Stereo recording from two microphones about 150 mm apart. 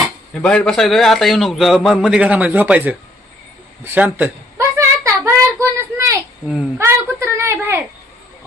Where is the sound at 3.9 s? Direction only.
10° right (ahead or behind).